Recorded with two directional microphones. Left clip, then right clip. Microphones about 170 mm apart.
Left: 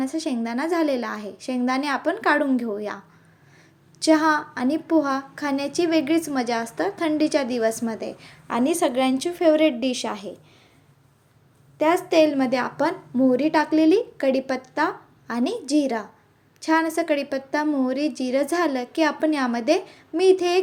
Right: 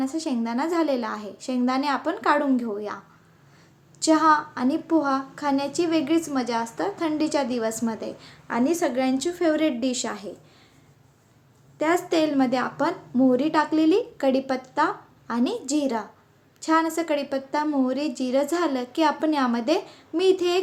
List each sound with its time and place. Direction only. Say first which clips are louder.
0.0 s a woman's voice: left 1 dB; 20° left (ahead or behind)
4.0 s a child's voice: even; 20° left (ahead or behind)
11.8 s a woman's voice: left 4 dB; 10° left (ahead or behind)